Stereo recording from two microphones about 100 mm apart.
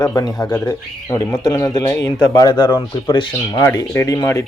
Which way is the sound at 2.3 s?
45° left (ahead or behind).